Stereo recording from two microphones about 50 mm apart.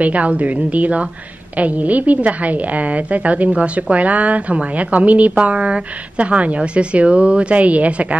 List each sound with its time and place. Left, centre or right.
0.0 s a woman's voice: right